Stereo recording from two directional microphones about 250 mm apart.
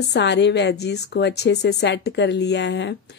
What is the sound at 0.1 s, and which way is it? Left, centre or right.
A woman's voice, left.